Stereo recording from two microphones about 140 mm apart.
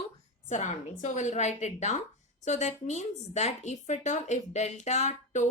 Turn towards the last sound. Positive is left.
turn(degrees=55)  # may be behind; listen again after turning